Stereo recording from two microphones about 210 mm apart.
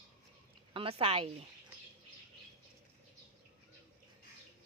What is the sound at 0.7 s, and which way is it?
Speech, 25° right (ahead or behind).